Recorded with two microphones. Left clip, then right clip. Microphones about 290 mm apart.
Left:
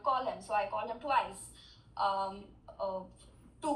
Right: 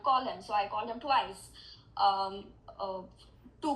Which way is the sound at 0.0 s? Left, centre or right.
Right.